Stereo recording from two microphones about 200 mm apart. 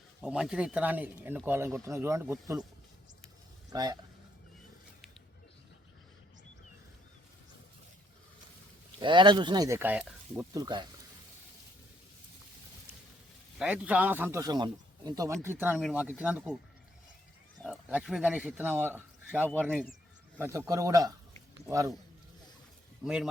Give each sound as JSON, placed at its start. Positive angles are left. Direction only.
{"t": 0.2, "sound": "a man's voice", "side_deg": -5}
{"t": 3.7, "sound": "speech", "side_deg": -20}
{"t": 9.0, "sound": "speech", "side_deg": -25}
{"t": 10.5, "sound": "speech", "side_deg": -20}
{"t": 13.6, "sound": "a man's voice", "side_deg": -5}
{"t": 17.6, "sound": "speech", "side_deg": -5}
{"t": 20.4, "sound": "a man's voice", "side_deg": -15}
{"t": 23.0, "sound": "speech", "side_deg": -5}